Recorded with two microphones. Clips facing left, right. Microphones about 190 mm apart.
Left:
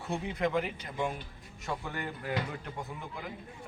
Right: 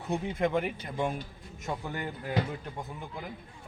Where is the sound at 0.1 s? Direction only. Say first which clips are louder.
Right 2 dB; 50° right (ahead or behind).